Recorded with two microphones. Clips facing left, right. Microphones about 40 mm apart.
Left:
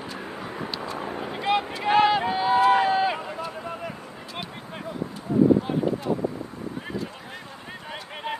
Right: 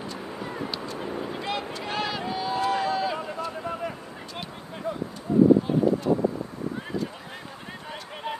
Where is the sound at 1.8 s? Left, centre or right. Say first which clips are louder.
Left 12 dB; left.